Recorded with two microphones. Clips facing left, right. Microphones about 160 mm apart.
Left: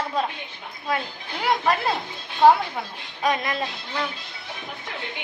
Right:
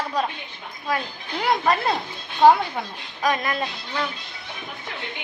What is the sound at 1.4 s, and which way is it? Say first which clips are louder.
A woman's voice: right 1 dB; centre (ahead or behind).